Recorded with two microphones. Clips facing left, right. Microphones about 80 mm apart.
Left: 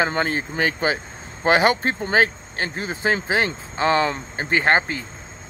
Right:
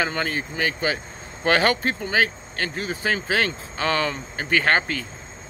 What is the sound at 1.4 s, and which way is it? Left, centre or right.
Speech, left.